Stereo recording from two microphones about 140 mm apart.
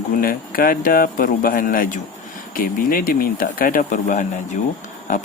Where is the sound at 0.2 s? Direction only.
90° left.